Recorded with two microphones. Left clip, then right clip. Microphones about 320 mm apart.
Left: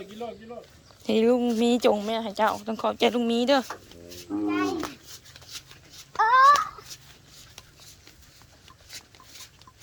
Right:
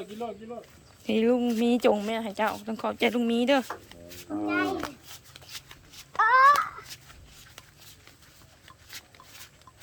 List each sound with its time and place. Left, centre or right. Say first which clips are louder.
1.0 s a child's voice: left 3 dB; centre
5.5 s dog: left 1 dB; centre
6.1 s speech: left 2 dB; centre